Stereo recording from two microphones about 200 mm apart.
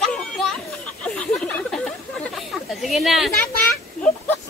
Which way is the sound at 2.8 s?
Centre (ahead or behind).